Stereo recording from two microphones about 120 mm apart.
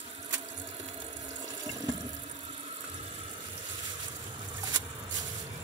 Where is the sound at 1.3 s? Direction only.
30° right (ahead or behind).